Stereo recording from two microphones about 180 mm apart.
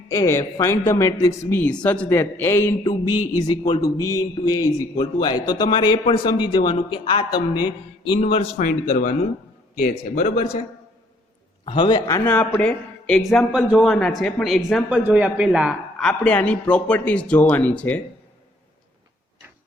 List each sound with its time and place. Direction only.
0.1 s a man's voice: 15° left (ahead or behind); by 8.4 s 35° left (ahead or behind)
8.5 s speech: 50° left (ahead or behind)
11.6 s speech: 25° left (ahead or behind); by 18.0 s 10° left (ahead or behind)